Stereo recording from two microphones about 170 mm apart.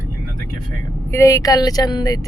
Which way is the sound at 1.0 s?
15° left (ahead or behind).